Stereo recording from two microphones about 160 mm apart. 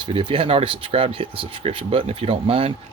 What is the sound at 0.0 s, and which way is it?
Speech, 35° right (ahead or behind).